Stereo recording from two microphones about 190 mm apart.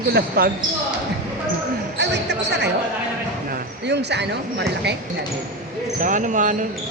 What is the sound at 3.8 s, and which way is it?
Speech, 65° right (ahead or behind).